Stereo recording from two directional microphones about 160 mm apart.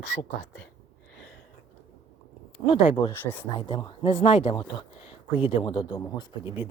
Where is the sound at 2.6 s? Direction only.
25° left (ahead or behind).